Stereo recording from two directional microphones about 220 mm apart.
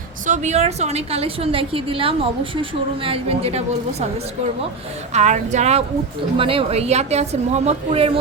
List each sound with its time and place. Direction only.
0.3 s a woman's voice: 30° right (ahead or behind)
5.1 s a woman's voice: 30° right (ahead or behind)